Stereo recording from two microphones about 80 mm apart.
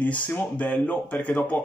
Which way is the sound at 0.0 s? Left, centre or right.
Centre.